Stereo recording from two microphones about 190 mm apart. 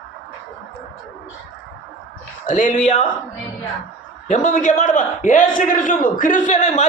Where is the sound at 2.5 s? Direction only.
40° left (ahead or behind).